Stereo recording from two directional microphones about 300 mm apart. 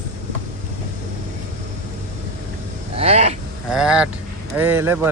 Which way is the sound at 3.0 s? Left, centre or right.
Right.